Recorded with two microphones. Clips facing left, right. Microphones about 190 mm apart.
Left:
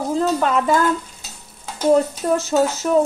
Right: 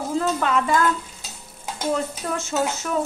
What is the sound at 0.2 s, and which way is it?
Speech, 40° left (ahead or behind).